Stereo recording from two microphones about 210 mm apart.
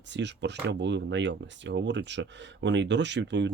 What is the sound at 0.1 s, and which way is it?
Speech, 55° right (ahead or behind).